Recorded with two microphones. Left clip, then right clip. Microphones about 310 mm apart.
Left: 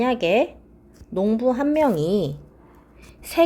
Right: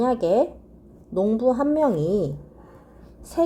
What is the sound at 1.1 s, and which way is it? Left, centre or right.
Speech, centre.